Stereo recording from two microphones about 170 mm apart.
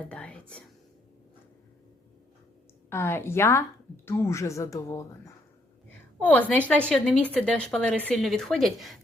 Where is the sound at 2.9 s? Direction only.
15° left (ahead or behind).